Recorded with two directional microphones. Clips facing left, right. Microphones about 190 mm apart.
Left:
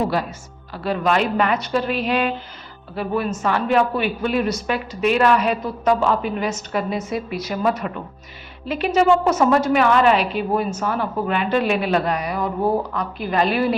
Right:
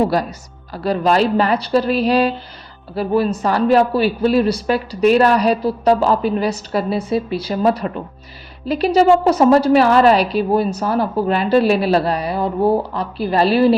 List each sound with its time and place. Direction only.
0.1 s a woman's voice: 40° right (ahead or behind)